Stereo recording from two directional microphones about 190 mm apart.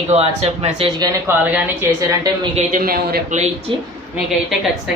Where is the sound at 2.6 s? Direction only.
45° right (ahead or behind).